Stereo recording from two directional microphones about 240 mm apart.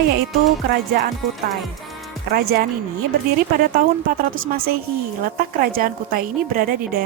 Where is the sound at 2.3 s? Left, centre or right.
Right.